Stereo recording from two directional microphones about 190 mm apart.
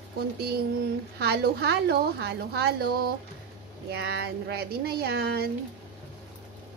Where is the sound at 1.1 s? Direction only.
60° right (ahead or behind).